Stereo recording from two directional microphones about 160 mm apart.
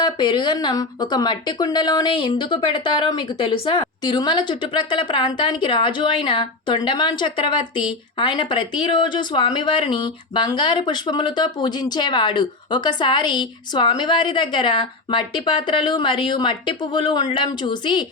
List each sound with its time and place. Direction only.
0.0 s a woman's voice: 30° left (ahead or behind)